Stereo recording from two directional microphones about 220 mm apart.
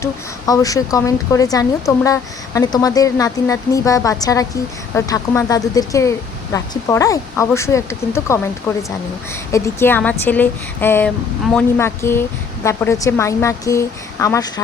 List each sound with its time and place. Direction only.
0.0 s speech: 15° left (ahead or behind)